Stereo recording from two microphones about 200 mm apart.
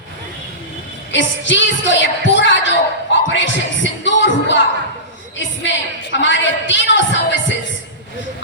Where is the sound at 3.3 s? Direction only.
65° left (ahead or behind).